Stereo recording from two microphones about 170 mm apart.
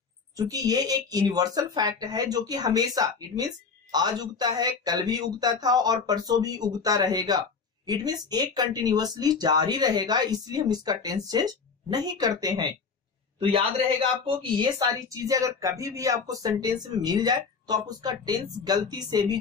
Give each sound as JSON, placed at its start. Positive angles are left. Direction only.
{"t": 0.4, "sound": "speech", "side_deg": -20}
{"t": 14.2, "sound": "speech", "side_deg": -30}